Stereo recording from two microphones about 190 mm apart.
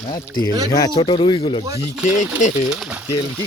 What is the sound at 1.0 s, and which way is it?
Speech, 25° left (ahead or behind).